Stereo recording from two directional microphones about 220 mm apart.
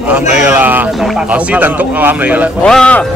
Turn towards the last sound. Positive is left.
turn(degrees=5)  # may be behind; listen again after turning